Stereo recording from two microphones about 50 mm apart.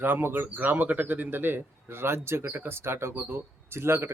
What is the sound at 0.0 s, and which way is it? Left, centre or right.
Speech, right.